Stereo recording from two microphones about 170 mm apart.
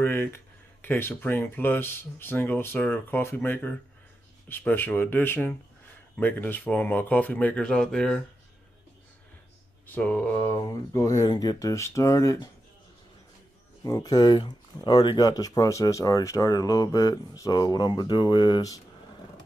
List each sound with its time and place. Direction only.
0.0 s a sound: 15° left (ahead or behind)
0.8 s speech: 10° left (ahead or behind)
9.8 s speech: 10° left (ahead or behind)
13.8 s speech: 20° left (ahead or behind)